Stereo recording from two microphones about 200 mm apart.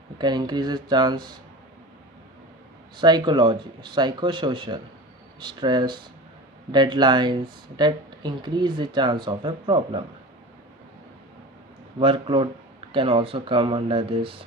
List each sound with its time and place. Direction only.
0.2 s speech: 20° right (ahead or behind)
3.0 s speech: 20° right (ahead or behind)
11.9 s speech: 25° right (ahead or behind)